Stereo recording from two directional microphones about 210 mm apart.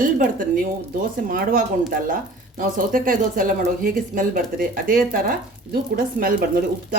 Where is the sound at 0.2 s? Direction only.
40° right (ahead or behind).